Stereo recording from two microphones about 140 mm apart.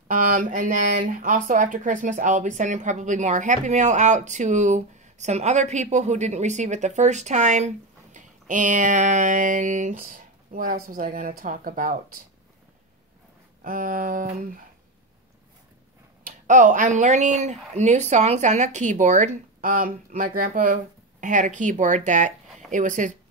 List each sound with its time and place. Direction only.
0.1 s speech: 65° right (ahead or behind)
13.7 s a sound: 80° right
16.3 s speech: 70° right (ahead or behind)